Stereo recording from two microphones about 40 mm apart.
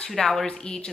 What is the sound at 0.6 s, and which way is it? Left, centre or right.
Speech, left.